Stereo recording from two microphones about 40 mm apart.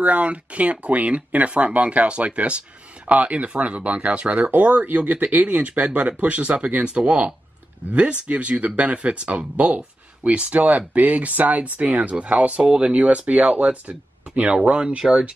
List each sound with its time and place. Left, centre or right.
0.0 s speech: right
4.5 s speech: right